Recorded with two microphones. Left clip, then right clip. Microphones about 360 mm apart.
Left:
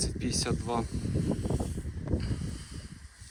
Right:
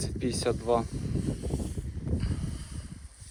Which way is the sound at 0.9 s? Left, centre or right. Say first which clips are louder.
Left 2 dB; left.